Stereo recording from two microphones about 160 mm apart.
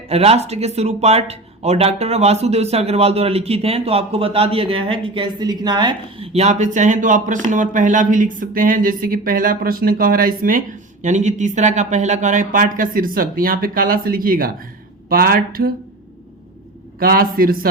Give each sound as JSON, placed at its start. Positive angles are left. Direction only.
{"t": 0.1, "sound": "speech", "side_deg": -40}
{"t": 11.0, "sound": "speech", "side_deg": -50}
{"t": 17.0, "sound": "speech", "side_deg": -65}